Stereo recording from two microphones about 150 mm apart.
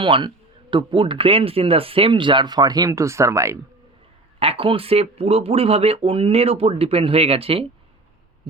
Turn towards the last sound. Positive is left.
turn(degrees=-40)  # may be behind; listen again after turning